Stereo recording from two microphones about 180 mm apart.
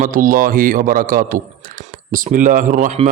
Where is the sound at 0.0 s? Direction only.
50° right (ahead or behind).